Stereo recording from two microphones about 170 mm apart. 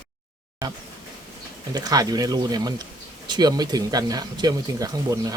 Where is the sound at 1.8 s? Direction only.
20° right (ahead or behind).